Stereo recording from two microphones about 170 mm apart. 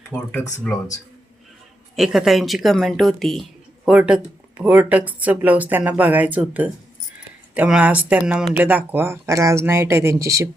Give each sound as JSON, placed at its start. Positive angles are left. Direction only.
{"t": 0.1, "sound": "speech", "side_deg": 20}
{"t": 2.0, "sound": "speech", "side_deg": 0}